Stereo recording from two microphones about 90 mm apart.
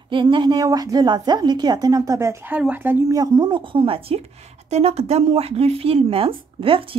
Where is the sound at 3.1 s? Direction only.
45° right (ahead or behind).